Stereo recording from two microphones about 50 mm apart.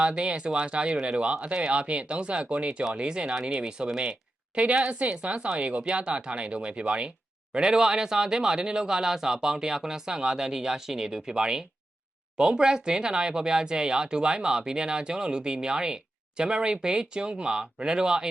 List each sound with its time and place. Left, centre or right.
0.0 s speech: right